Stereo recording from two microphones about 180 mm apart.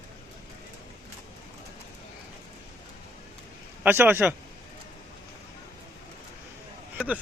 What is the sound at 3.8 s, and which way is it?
Speech, 10° right (ahead or behind).